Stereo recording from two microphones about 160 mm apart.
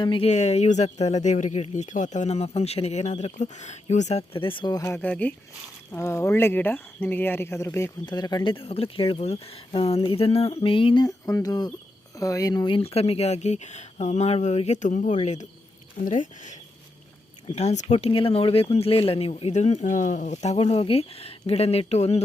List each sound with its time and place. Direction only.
0.0 s speech: 35° left (ahead or behind)
4.3 s speech: 35° left (ahead or behind)